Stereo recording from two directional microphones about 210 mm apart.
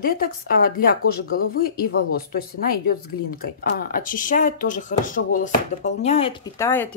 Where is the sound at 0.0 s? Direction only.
45° left (ahead or behind).